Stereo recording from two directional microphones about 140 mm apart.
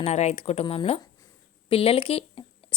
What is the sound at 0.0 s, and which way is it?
A woman's voice, 55° left (ahead or behind).